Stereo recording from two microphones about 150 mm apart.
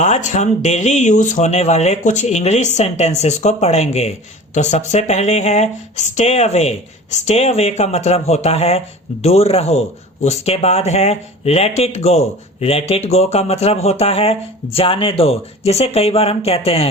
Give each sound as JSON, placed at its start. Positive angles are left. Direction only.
{"t": 0.0, "sound": "speech", "side_deg": 50}